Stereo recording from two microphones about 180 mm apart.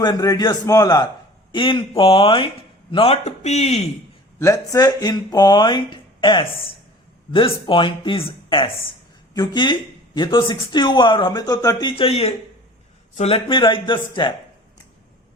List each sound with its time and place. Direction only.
0.0 s speech: 20° left (ahead or behind); by 3.8 s 35° left (ahead or behind)
4.4 s a woman's voice: 15° left (ahead or behind)